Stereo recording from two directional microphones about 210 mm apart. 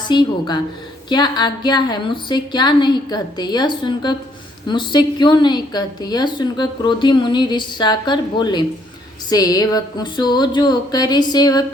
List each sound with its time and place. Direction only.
0.1 s a woman's voice: 20° left (ahead or behind)